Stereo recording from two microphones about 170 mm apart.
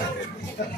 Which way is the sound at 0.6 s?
75° left (ahead or behind).